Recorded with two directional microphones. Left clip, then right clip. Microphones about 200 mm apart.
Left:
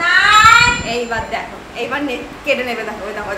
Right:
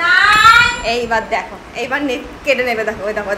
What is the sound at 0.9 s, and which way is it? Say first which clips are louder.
A woman's voice: right 4 dB; 35° right (ahead or behind).